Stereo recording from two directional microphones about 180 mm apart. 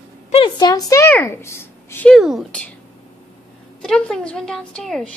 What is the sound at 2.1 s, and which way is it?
Speech, centre (ahead or behind).